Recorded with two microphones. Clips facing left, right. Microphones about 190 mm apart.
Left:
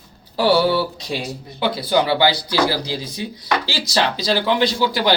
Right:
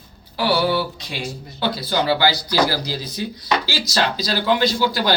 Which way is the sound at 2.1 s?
25° left (ahead or behind).